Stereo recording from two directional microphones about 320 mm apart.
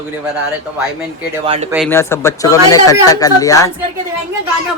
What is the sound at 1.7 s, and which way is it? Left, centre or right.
Speech, centre.